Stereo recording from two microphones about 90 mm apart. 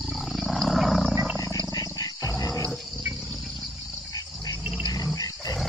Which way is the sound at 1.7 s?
45° left (ahead or behind).